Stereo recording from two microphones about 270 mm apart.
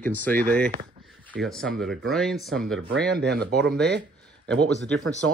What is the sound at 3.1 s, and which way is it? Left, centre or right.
Speech, right.